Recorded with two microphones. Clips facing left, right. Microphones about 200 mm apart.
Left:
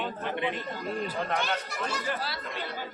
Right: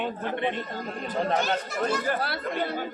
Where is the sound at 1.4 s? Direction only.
50° right (ahead or behind).